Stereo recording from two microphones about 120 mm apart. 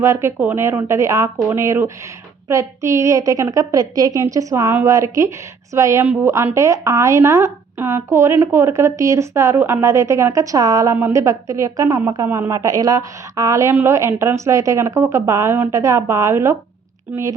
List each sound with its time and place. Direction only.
0.0 s speech: 20° right (ahead or behind)
10.9 s speech: 20° right (ahead or behind)
12.5 s a woman's voice: 30° right (ahead or behind)